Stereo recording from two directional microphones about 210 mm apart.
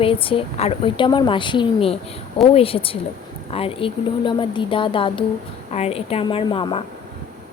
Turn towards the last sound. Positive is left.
turn(degrees=25)  # may be behind; listen again after turning